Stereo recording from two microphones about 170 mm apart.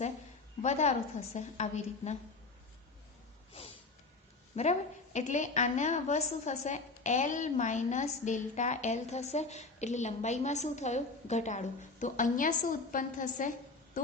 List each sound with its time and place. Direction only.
0.6 s a woman's voice: 40° left (ahead or behind)
4.5 s a woman's voice: 40° left (ahead or behind)